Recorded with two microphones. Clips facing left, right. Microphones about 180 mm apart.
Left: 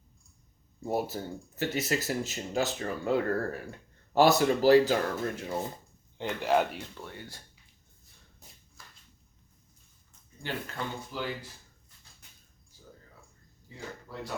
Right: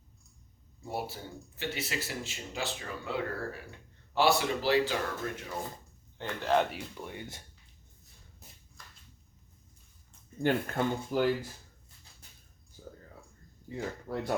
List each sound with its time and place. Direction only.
0.9 s speech: 45° left (ahead or behind)
5.4 s speech: 25° left (ahead or behind)
6.1 s speech: 15° left (ahead or behind)
6.9 s speech: 15° right (ahead or behind)
8.8 s a sound: 5° left (ahead or behind)
10.4 s speech: 50° right (ahead or behind)
13.7 s speech: 55° right (ahead or behind)